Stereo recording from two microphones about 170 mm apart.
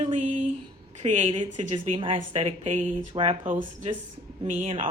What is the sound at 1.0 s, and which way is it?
Speech, 45° right (ahead or behind).